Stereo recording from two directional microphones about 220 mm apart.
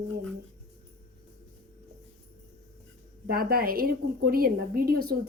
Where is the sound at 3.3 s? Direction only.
45° right (ahead or behind).